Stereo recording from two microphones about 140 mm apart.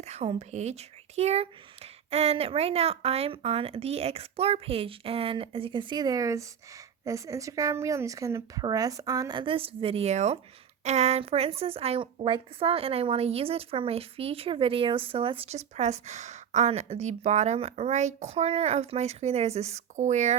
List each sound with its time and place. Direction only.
0.0 s a woman's voice: 50° right (ahead or behind)